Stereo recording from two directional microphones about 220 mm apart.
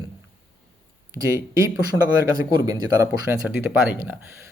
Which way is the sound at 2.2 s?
15° right (ahead or behind).